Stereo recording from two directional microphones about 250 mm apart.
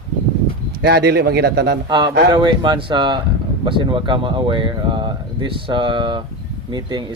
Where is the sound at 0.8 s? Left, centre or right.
Right.